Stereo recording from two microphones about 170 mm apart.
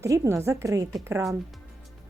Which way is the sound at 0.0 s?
15° right (ahead or behind).